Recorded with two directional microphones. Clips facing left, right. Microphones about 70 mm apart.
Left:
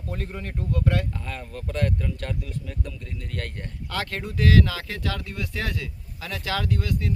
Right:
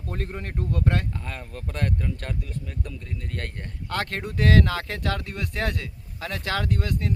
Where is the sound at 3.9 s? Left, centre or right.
Right.